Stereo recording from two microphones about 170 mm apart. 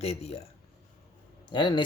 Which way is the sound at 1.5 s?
25° left (ahead or behind).